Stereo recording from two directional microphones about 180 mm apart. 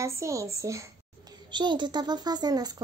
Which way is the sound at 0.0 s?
15° right (ahead or behind).